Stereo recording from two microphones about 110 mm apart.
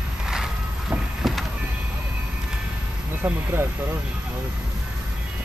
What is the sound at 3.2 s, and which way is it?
Speech, 15° right (ahead or behind).